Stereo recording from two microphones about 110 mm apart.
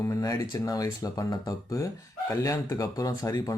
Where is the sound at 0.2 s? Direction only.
35° left (ahead or behind).